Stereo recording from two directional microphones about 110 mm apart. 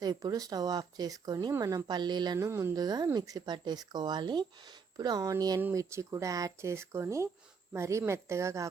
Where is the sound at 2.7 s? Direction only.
35° right (ahead or behind).